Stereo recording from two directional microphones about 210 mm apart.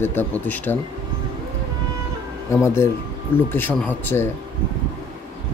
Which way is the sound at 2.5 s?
10° left (ahead or behind).